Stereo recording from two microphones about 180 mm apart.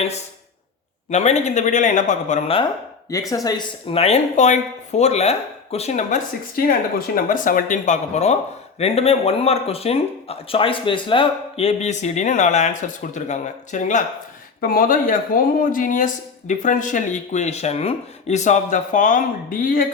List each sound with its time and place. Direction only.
1.1 s speech: 40° left (ahead or behind)
3.1 s speech: 20° left (ahead or behind)
3.8 s speech: 35° left (ahead or behind)
7.3 s speech: 50° left (ahead or behind)